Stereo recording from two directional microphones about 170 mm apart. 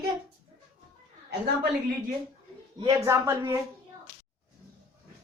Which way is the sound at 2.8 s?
20° right (ahead or behind).